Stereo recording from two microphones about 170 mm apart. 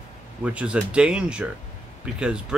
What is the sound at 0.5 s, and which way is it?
Speech, 5° right (ahead or behind).